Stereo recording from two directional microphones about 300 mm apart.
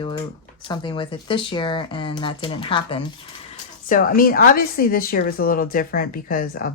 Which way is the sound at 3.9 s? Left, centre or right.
Left.